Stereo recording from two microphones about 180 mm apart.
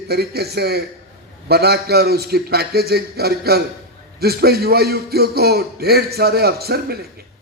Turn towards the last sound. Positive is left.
turn(degrees=-60)  # may be behind; listen again after turning